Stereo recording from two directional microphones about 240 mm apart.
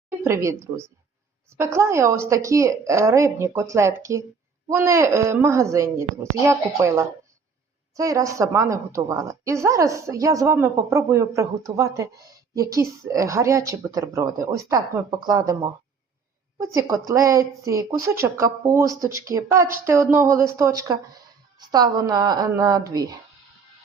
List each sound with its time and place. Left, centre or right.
0.3 s a woman's voice: centre
16.7 s a woman's voice: centre